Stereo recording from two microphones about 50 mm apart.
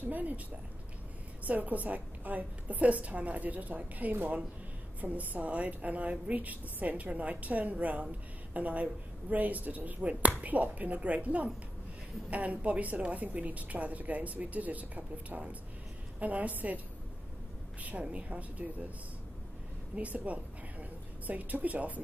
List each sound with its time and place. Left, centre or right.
0.0 s speech: right
1.4 s a woman's voice: right
20.0 s a woman's voice: right